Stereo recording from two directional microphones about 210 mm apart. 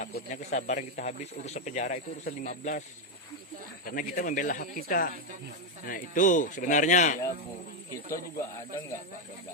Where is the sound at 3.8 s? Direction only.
40° left (ahead or behind).